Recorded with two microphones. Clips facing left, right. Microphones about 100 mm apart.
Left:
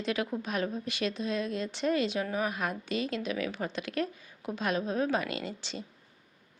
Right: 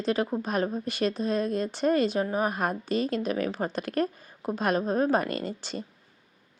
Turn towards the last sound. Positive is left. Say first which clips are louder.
# right 5 dB
turn(degrees=-50)  # may be behind; listen again after turning